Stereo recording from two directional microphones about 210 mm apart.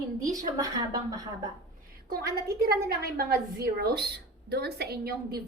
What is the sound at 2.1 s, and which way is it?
A woman's voice, 50° right (ahead or behind).